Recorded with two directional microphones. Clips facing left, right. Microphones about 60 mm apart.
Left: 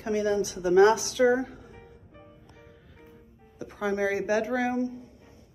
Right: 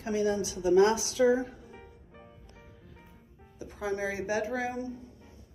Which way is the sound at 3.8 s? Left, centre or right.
Left.